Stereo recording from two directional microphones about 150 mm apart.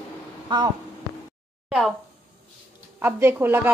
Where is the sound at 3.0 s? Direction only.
15° right (ahead or behind).